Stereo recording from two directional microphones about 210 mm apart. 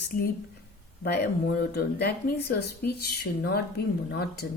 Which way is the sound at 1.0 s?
50° left (ahead or behind).